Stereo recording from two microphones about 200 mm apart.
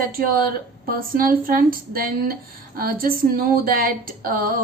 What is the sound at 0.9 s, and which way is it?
A woman's voice, 45° right (ahead or behind).